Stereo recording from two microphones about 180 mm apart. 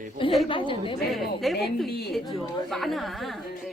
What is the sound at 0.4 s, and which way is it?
Speech, 30° left (ahead or behind).